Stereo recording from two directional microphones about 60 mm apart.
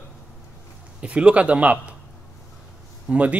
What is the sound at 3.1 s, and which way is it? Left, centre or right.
Speech, right.